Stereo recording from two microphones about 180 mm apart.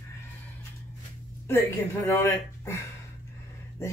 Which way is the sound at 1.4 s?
15° left (ahead or behind).